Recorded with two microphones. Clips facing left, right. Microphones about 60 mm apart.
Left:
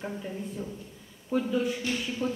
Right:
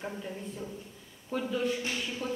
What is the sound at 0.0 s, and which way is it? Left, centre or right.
Speech, centre.